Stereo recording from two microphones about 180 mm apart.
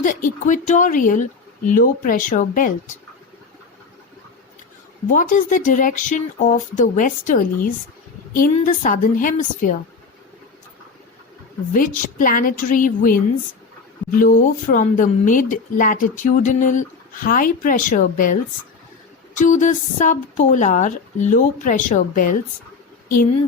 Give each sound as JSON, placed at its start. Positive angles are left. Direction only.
{"t": 0.0, "sound": "speech", "side_deg": 50}
{"t": 5.0, "sound": "speech", "side_deg": 45}
{"t": 11.7, "sound": "speech", "side_deg": 50}
{"t": 14.2, "sound": "speech", "side_deg": 45}
{"t": 19.4, "sound": "speech", "side_deg": 45}